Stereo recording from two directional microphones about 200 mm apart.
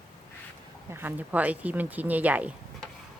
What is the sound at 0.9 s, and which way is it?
Speech, 10° right (ahead or behind).